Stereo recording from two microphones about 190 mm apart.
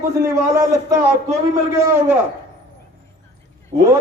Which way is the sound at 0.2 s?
15° right (ahead or behind).